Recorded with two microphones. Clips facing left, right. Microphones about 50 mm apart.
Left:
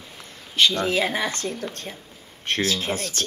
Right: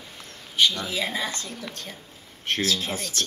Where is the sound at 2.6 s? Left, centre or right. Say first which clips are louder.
Left 3 dB; left.